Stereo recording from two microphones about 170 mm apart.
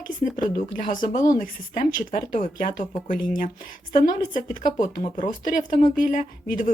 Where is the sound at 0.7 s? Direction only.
50° left (ahead or behind).